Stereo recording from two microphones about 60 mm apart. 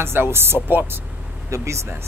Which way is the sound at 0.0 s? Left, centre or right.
Right.